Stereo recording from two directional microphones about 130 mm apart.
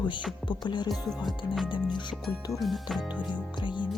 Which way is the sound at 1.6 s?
35° left (ahead or behind).